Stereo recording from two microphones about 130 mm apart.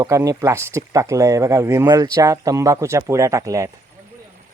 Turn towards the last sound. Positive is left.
turn(degrees=-25)  # may be behind; listen again after turning